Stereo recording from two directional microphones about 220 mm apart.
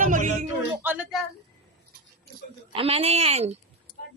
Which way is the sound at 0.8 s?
5° right (ahead or behind).